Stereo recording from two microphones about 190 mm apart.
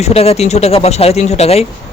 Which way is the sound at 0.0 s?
30° left (ahead or behind).